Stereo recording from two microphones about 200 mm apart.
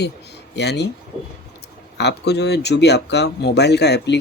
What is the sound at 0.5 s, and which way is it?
Speech, 55° left (ahead or behind).